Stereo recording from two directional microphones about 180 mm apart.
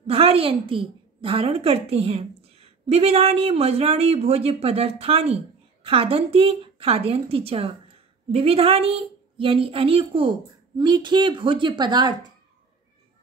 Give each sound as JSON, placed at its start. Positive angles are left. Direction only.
{"t": 0.0, "sound": "a woman's voice", "side_deg": -35}